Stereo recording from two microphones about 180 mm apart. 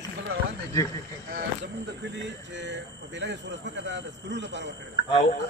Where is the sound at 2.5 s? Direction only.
80° right.